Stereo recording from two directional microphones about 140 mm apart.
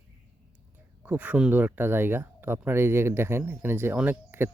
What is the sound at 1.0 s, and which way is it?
Speech, 15° right (ahead or behind).